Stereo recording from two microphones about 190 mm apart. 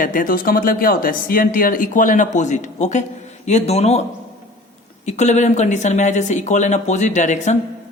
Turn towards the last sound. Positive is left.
turn(degrees=40)  # may be behind; listen again after turning